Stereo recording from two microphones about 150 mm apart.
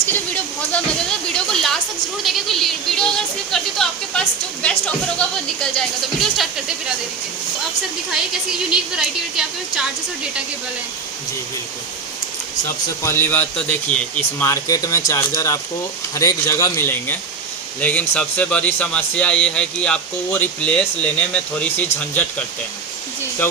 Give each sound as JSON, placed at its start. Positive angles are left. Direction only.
{"t": 1.3, "sound": "a sound", "side_deg": 5}
{"t": 2.2, "sound": "a man's voice", "side_deg": 0}
{"t": 8.1, "sound": "a woman's voice", "side_deg": -5}
{"t": 13.0, "sound": "a man's voice", "side_deg": 15}